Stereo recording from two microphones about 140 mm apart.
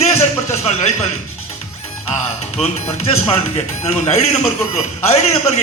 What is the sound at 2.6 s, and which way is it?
A man's voice, 45° left (ahead or behind).